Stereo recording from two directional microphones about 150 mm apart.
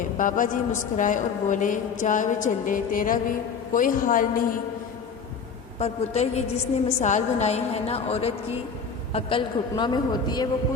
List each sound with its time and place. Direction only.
0.2 s a man's voice: 60° left (ahead or behind)
5.8 s a woman's voice: 45° left (ahead or behind); by 10.5 s 25° left (ahead or behind)